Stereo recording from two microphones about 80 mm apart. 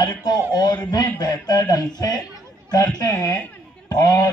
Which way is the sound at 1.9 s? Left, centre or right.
Left.